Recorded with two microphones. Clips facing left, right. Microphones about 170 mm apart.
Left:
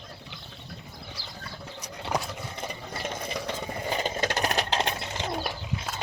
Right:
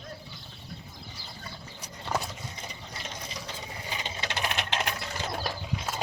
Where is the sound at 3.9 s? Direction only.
50° left (ahead or behind); by 5.3 s 25° left (ahead or behind).